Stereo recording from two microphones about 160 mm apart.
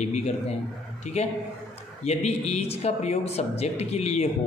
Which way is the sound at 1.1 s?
40° left (ahead or behind).